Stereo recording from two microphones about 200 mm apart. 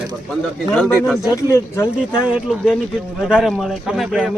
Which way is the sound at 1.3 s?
15° left (ahead or behind).